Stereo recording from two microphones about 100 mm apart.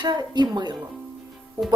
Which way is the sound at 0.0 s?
45° right (ahead or behind).